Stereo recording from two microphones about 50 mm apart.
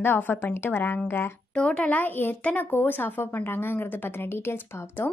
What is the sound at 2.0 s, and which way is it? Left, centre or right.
A woman's voice, left.